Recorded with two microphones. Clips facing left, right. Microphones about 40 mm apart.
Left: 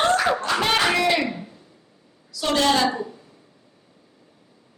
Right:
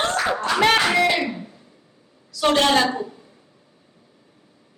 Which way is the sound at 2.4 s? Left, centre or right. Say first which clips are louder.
Right 3 dB; right.